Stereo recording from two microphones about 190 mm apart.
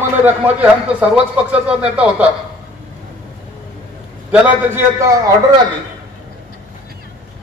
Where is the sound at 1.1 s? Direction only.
5° right (ahead or behind).